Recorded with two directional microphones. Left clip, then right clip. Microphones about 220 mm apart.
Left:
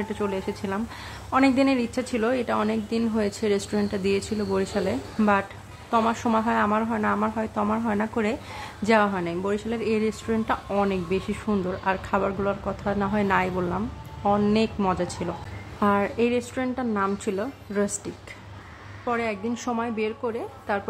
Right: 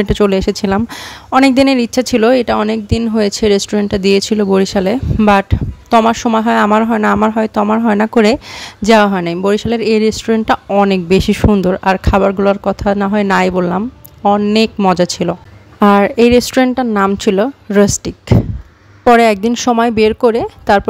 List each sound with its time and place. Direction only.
0.0 s speech: 55° right (ahead or behind)